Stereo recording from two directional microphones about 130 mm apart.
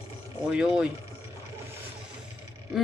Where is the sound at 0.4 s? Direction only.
5° right (ahead or behind).